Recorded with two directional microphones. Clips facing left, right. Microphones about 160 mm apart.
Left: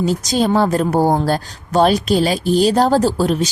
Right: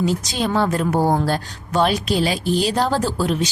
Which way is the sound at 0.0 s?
40° left (ahead or behind).